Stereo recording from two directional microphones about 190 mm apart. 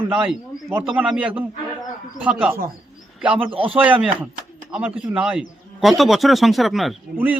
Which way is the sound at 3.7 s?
10° right (ahead or behind).